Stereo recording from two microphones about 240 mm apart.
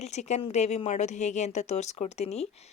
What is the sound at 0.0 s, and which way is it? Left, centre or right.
A woman's voice, left.